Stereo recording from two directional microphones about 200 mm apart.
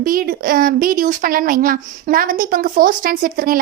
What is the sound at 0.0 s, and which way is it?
A woman's voice, 45° right (ahead or behind).